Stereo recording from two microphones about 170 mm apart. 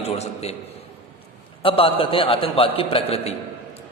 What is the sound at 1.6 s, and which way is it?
A man's voice, 30° left (ahead or behind).